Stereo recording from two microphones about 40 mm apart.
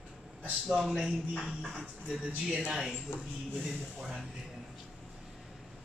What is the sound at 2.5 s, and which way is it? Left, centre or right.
Speech, centre.